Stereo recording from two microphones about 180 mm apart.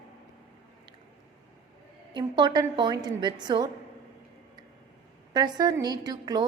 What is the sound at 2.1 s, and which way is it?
A woman's voice, 25° right (ahead or behind).